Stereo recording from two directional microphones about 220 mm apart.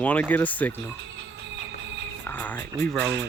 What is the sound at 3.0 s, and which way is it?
Speech, 50° right (ahead or behind).